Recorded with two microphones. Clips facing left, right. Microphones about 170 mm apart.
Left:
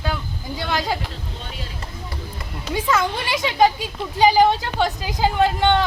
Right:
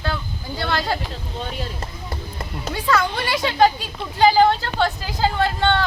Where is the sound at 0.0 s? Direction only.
15° left (ahead or behind).